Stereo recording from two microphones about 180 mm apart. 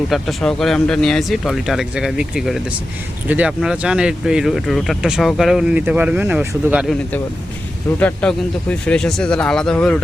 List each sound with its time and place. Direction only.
0.1 s speech: centre (ahead or behind)
7.9 s speech: 5° left (ahead or behind)